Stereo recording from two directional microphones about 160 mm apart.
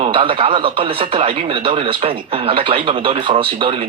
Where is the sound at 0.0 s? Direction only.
30° right (ahead or behind).